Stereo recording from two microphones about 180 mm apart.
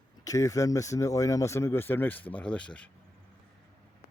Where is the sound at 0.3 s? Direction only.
20° left (ahead or behind).